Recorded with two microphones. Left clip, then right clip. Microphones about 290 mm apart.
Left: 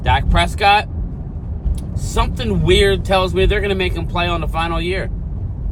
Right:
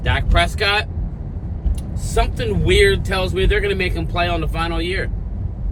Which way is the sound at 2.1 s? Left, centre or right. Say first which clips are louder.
Even; centre.